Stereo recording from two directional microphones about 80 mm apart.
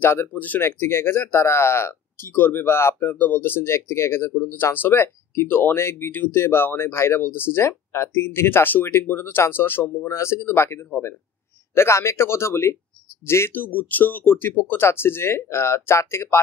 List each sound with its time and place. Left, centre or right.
0.0 s speech: left
0.3 s speech: left